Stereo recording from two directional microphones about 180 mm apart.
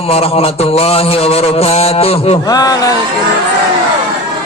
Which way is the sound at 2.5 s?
20° left (ahead or behind).